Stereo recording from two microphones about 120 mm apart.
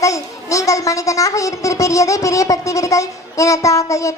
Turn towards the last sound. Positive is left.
turn(degrees=25)  # may be behind; listen again after turning